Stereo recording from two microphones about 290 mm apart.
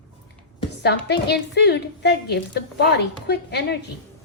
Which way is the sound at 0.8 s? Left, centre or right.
Left.